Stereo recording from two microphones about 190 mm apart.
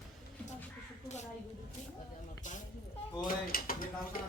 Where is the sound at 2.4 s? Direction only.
40° left (ahead or behind).